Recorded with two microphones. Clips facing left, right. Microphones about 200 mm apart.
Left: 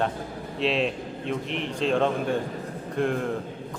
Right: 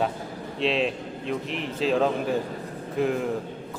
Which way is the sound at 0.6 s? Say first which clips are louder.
Even; centre (ahead or behind).